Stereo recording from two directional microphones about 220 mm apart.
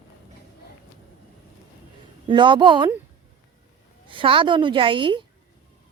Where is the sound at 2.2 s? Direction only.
20° right (ahead or behind).